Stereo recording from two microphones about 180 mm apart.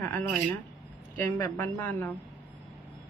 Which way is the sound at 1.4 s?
10° left (ahead or behind).